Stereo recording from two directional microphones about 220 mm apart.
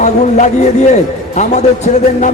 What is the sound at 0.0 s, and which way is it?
A man's voice, 30° left (ahead or behind).